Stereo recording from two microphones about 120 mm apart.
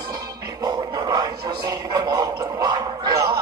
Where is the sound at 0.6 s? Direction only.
35° right (ahead or behind).